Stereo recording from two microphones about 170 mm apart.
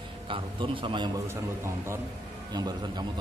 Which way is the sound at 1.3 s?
15° right (ahead or behind).